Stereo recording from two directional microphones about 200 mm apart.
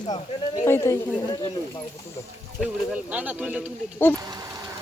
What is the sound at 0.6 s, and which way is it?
Speech, 15° left (ahead or behind).